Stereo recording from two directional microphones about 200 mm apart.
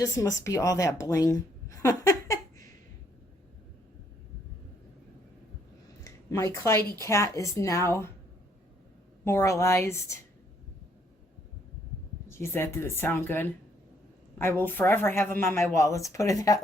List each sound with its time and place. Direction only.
0.0 s speech: 15° left (ahead or behind)
2.0 s a sound: 15° left (ahead or behind)
6.1 s a woman's voice: 15° left (ahead or behind)
9.2 s speech: 15° left (ahead or behind)
12.3 s speech: 15° left (ahead or behind)